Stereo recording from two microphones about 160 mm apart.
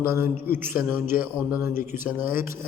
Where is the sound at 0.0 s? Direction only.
15° right (ahead or behind).